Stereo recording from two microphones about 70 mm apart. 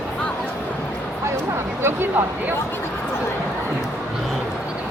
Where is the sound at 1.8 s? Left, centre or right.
Right.